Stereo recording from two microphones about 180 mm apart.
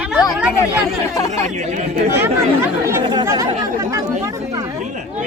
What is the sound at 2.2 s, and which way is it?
Speech, 15° right (ahead or behind).